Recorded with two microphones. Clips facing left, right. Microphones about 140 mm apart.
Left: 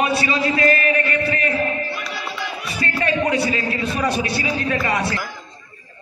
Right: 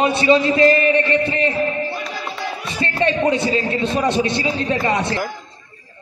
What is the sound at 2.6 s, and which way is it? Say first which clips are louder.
A man's voice: right 4 dB; 25° right (ahead or behind).